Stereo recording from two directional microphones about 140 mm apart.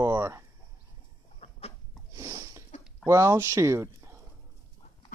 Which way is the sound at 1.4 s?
45° left (ahead or behind).